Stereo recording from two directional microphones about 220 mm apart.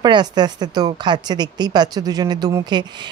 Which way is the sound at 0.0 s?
20° right (ahead or behind).